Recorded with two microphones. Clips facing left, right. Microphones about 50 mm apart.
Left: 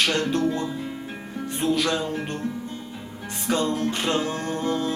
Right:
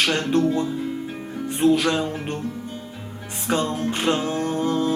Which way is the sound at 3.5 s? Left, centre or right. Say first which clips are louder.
Right 1 dB; right.